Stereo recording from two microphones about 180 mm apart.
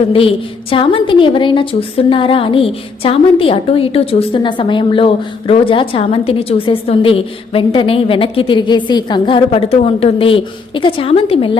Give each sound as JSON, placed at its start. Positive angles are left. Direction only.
{"t": 0.1, "sound": "a woman's voice", "side_deg": 30}